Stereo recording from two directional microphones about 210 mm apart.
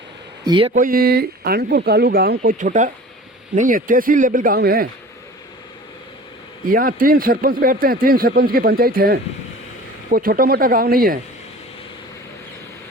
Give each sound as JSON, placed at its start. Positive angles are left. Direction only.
{"t": 0.4, "sound": "speech", "side_deg": -20}
{"t": 0.7, "sound": "a man's voice", "side_deg": -40}
{"t": 6.7, "sound": "a man's voice", "side_deg": -40}